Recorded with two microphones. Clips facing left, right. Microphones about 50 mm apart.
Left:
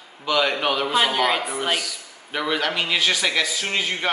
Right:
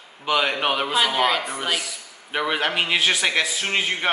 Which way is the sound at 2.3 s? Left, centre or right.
Right.